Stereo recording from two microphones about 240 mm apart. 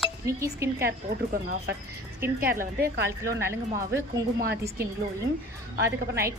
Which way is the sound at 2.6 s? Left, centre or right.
Right.